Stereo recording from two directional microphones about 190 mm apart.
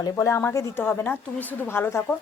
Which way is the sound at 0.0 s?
15° left (ahead or behind).